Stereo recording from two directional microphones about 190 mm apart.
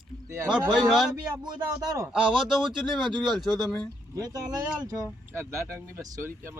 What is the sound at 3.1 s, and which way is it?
Speech, 25° right (ahead or behind).